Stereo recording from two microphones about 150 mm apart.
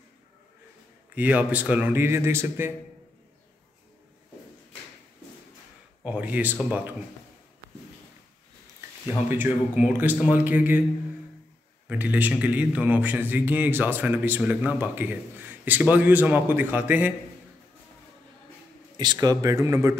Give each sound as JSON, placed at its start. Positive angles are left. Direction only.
{"t": 1.1, "sound": "a man's voice", "side_deg": -10}
{"t": 6.0, "sound": "a man's voice", "side_deg": -10}
{"t": 9.3, "sound": "a man's voice", "side_deg": -15}
{"t": 11.9, "sound": "a man's voice", "side_deg": -10}
{"t": 18.9, "sound": "speech", "side_deg": -25}